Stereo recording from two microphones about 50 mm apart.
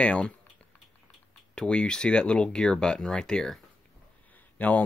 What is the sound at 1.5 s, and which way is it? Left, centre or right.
Speech, centre.